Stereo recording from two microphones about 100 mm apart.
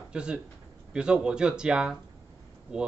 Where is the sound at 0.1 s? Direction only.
10° right (ahead or behind).